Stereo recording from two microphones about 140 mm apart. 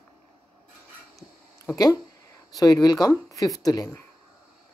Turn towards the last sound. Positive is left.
turn(degrees=25)  # may be behind; listen again after turning